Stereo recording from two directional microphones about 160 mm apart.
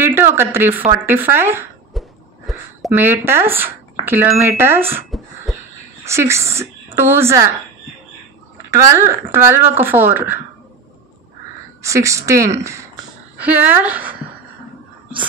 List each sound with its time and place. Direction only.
0.0 s a woman's voice: 15° right (ahead or behind)
2.0 s a sound: centre (ahead or behind)
2.9 s a woman's voice: 15° right (ahead or behind)
5.5 s crow: centre (ahead or behind)
6.0 s a woman's voice: 15° right (ahead or behind)
8.6 s a woman's voice: 20° right (ahead or behind)
11.8 s a woman's voice: 20° right (ahead or behind)